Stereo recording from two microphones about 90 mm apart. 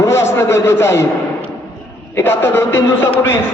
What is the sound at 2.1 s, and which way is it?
Speech, 25° left (ahead or behind).